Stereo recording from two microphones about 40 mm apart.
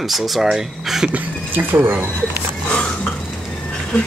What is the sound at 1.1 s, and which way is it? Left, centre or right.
Speech, right.